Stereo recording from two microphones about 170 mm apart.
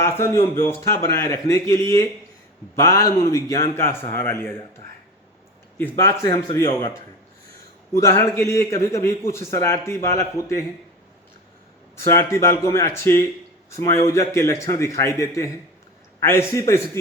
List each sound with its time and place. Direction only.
0.0 s a man's voice: 15° left (ahead or behind)
5.7 s a man's voice: 15° left (ahead or behind)
7.9 s a man's voice: 20° left (ahead or behind)
11.9 s a man's voice: 15° left (ahead or behind)